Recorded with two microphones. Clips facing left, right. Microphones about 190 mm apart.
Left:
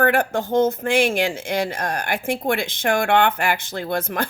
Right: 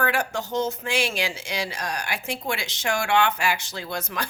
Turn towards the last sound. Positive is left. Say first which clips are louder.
# left 7 dB
turn(degrees=55)  # may be behind; listen again after turning